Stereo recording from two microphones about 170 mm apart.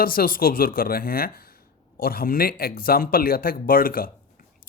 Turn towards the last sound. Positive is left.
turn(degrees=60)  # may be behind; listen again after turning